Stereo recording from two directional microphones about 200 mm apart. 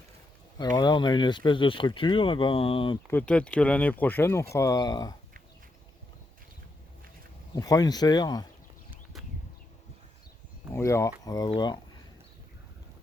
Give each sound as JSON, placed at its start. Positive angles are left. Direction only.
{"t": 0.6, "sound": "speech", "side_deg": 20}
{"t": 3.1, "sound": "speech", "side_deg": 5}
{"t": 7.5, "sound": "speech", "side_deg": 20}
{"t": 10.7, "sound": "speech", "side_deg": 15}